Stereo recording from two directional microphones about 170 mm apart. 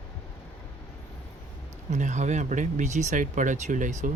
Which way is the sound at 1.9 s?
45° right (ahead or behind).